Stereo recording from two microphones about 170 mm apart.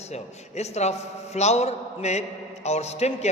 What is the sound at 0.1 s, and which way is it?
A man's voice, 40° left (ahead or behind).